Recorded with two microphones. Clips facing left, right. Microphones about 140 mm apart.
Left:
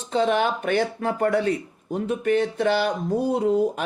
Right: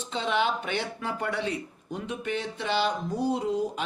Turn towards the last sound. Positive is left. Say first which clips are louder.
# left 7 dB
turn(degrees=55)  # may be behind; listen again after turning